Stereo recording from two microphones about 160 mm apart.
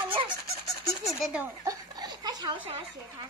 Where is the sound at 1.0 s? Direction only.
5° right (ahead or behind).